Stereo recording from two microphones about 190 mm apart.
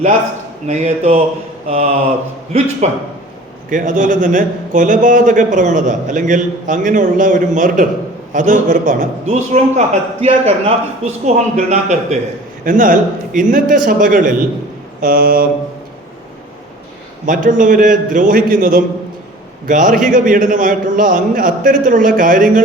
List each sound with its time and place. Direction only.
0.7 s a man's voice: 35° right (ahead or behind)
17.2 s a man's voice: 40° right (ahead or behind)